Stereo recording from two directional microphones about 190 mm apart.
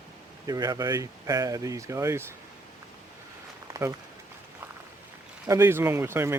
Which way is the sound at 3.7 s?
15° right (ahead or behind).